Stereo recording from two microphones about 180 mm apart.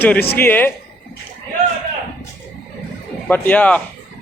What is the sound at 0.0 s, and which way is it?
Speech, 10° left (ahead or behind).